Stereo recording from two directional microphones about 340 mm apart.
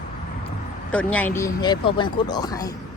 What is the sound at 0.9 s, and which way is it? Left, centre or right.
Speech, centre.